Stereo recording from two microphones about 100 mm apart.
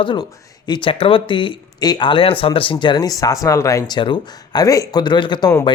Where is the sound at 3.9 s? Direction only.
55° left (ahead or behind).